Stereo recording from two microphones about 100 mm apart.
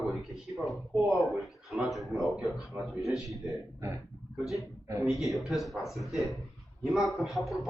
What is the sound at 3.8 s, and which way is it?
Speech, 30° right (ahead or behind).